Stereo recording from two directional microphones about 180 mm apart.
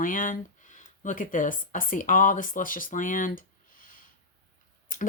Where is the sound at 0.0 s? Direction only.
45° left (ahead or behind).